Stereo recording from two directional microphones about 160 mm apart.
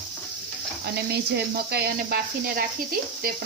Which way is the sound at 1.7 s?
75° right (ahead or behind).